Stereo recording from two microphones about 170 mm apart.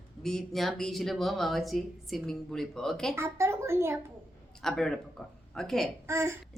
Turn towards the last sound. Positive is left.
turn(degrees=-15)  # may be behind; listen again after turning